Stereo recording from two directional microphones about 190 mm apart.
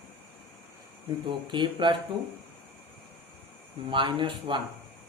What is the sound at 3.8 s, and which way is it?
Speech, 25° right (ahead or behind).